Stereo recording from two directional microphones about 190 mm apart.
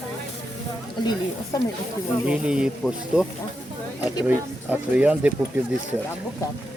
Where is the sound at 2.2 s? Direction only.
5° right (ahead or behind).